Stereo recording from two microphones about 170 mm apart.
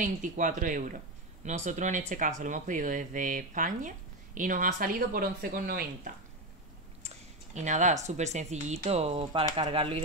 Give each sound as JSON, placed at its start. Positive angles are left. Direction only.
{"t": 0.0, "sound": "speech", "side_deg": -50}
{"t": 7.0, "sound": "speech", "side_deg": -40}